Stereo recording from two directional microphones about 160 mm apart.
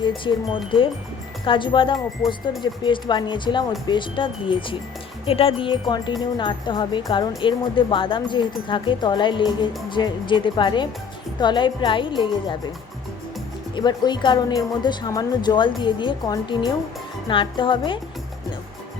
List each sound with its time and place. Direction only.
0.3 s speech: 30° left (ahead or behind)
13.7 s speech: 25° left (ahead or behind)